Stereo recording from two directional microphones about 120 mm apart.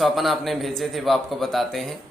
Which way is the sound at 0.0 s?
Centre (ahead or behind).